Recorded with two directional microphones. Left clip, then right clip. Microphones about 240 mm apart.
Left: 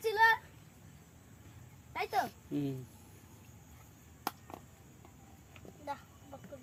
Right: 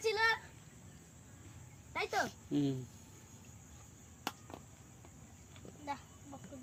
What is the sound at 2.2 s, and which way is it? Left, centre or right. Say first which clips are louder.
Speech: right 2 dB; centre.